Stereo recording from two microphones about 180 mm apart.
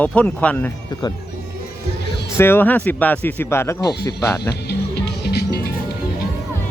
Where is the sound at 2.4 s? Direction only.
10° left (ahead or behind).